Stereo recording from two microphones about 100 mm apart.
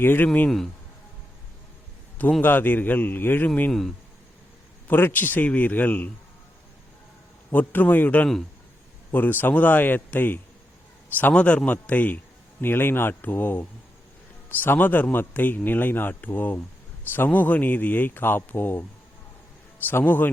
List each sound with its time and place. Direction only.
0.0 s speech: 20° left (ahead or behind)
2.4 s a man's voice: 20° left (ahead or behind)
3.7 s speech: 5° left (ahead or behind)
4.9 s a man's voice: 20° left (ahead or behind)
7.5 s a man's voice: 20° left (ahead or behind)